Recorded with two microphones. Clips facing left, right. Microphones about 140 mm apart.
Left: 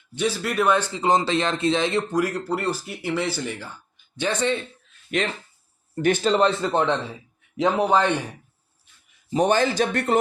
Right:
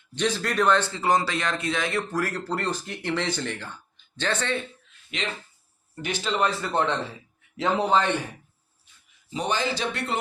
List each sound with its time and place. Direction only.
0.2 s a man's voice: 10° left (ahead or behind)
5.1 s speech: 50° left (ahead or behind)
6.3 s a man's voice: 25° left (ahead or behind)
9.3 s speech: 50° left (ahead or behind)